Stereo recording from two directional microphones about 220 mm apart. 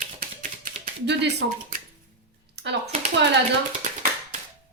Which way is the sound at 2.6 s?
50° right (ahead or behind).